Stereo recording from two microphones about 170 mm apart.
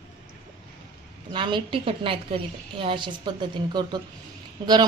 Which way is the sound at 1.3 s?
30° right (ahead or behind).